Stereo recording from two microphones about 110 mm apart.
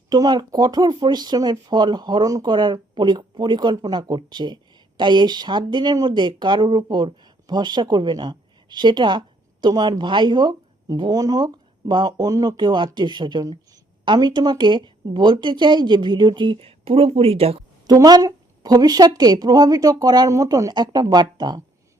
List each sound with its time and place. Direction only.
0.1 s a woman's voice: 40° right (ahead or behind); by 17.6 s 65° right (ahead or behind)
17.8 s a woman's voice: 35° right (ahead or behind)